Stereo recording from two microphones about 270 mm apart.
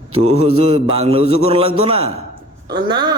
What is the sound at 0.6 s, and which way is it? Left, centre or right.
Mantra, right.